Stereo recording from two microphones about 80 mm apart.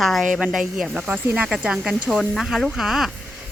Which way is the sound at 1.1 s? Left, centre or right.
Right.